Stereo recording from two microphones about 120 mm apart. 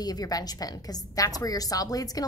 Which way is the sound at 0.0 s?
30° left (ahead or behind).